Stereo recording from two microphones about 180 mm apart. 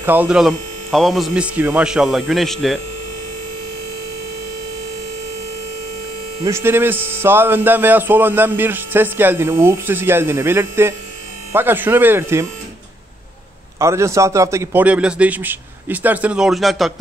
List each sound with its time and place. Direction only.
0.0 s speech: 10° right (ahead or behind)
6.4 s speech: 15° right (ahead or behind)
13.7 s speech: 15° right (ahead or behind); by 16.9 s centre (ahead or behind)